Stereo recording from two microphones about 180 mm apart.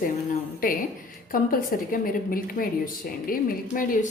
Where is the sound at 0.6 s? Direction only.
50° left (ahead or behind).